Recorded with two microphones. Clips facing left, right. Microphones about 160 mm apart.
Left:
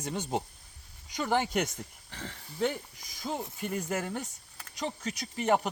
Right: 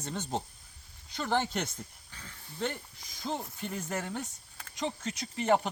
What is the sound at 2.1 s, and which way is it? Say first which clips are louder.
Speech: left 8 dB; 75° left (ahead or behind).